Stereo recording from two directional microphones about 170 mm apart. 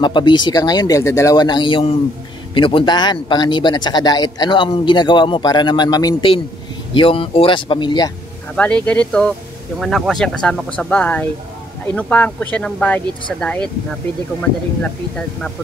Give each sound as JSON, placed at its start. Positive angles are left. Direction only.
{"t": 0.0, "sound": "speech", "side_deg": 25}
{"t": 8.5, "sound": "speech", "side_deg": 10}
{"t": 14.8, "sound": "speech", "side_deg": 5}